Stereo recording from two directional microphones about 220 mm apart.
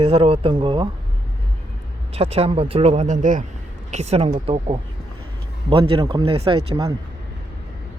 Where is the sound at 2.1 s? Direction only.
25° right (ahead or behind).